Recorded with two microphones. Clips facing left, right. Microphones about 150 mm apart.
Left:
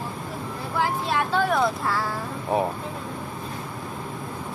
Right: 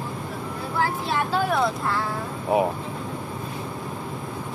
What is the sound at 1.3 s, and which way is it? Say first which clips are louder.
Speech: even; centre (ahead or behind).